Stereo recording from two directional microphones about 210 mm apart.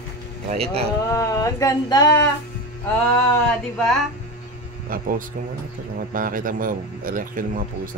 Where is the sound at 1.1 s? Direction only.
15° left (ahead or behind).